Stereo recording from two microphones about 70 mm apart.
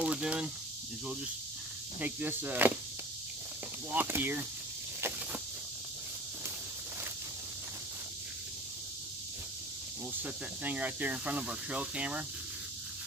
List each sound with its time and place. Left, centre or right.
0.0 s snake: centre
2.0 s speech: right
3.9 s speech: right
10.2 s speech: right